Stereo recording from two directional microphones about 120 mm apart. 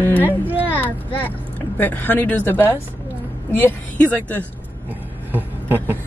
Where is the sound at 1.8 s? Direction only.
15° left (ahead or behind).